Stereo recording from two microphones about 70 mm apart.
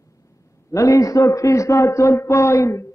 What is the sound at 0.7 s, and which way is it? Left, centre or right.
A man's voice, left.